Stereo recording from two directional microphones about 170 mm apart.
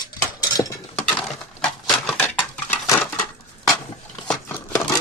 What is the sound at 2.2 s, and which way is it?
Dishes, 15° left (ahead or behind).